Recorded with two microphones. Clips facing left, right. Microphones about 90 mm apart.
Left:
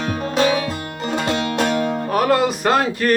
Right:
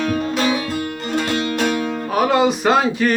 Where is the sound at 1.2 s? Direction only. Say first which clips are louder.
Left 1 dB; 30° left (ahead or behind).